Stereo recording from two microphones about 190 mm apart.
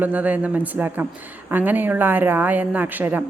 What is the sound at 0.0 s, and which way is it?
Speech, 10° right (ahead or behind).